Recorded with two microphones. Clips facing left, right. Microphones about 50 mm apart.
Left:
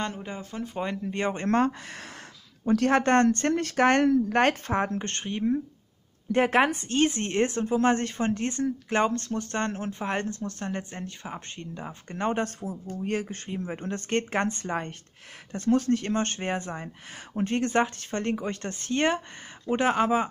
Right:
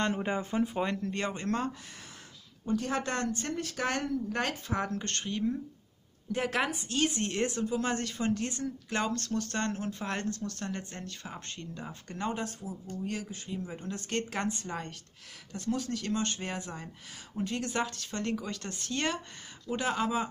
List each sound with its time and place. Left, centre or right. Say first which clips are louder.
0.1 s speech: right 5 dB; right
1.0 s speech: left 5 dB; centre
1.3 s speech: left 8 dB; left
2.6 s speech: left 8 dB; left
2.9 s speech: left 11 dB; left
4.8 s speech: left 4 dB; left
12.3 s speech: left 8 dB; left